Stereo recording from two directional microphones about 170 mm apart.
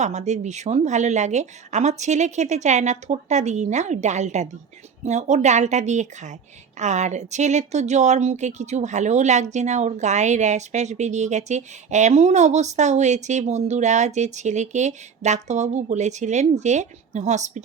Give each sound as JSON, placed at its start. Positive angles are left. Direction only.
{"t": 0.0, "sound": "speech", "side_deg": -45}